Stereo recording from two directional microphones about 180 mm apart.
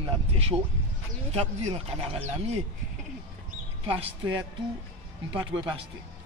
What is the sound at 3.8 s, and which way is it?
Speech, 30° right (ahead or behind).